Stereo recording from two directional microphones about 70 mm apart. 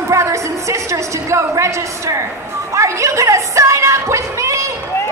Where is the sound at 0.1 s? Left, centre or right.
Right.